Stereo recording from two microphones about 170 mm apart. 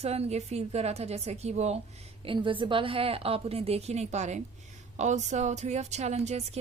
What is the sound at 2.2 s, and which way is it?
A woman's voice, 30° right (ahead or behind).